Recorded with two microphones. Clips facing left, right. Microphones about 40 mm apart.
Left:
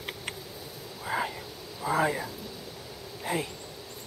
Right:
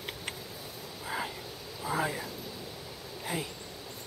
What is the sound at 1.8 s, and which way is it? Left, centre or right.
Speech, centre.